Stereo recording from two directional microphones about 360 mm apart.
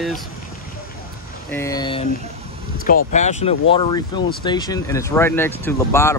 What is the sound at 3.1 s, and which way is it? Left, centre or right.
Speech, centre.